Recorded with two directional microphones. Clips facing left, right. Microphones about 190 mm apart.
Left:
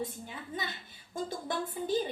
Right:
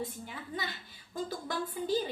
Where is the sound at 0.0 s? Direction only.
20° left (ahead or behind).